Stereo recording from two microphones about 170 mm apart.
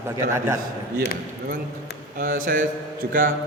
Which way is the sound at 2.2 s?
55° right (ahead or behind).